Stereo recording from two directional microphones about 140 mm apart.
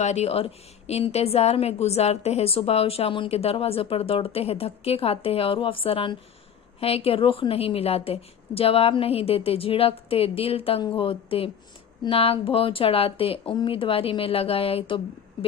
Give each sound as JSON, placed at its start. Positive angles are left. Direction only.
{"t": 0.0, "sound": "a woman's voice", "side_deg": 50}